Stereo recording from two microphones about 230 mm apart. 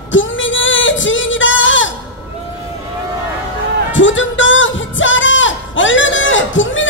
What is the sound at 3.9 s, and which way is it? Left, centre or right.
Music, left.